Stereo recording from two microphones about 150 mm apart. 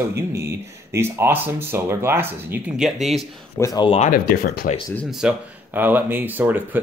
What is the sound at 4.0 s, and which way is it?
Speech, 60° left (ahead or behind).